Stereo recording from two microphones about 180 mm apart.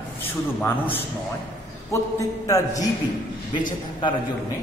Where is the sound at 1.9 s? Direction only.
15° left (ahead or behind).